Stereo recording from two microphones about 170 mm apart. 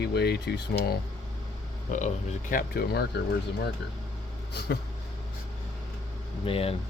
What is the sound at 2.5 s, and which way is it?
Speech, 65° left (ahead or behind).